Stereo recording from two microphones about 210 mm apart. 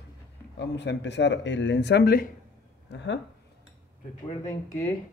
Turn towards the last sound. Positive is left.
turn(degrees=15)  # may be behind; listen again after turning